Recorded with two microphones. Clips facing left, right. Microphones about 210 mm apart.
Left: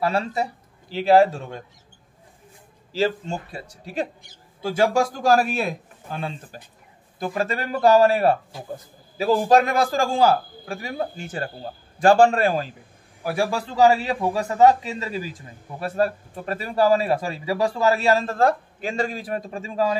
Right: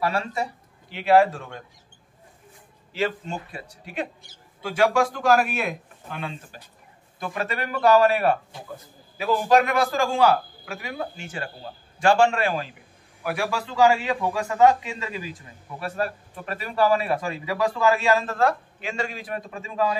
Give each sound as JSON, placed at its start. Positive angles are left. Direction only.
{"t": 0.0, "sound": "speech", "side_deg": 30}
{"t": 2.9, "sound": "a man's voice", "side_deg": 35}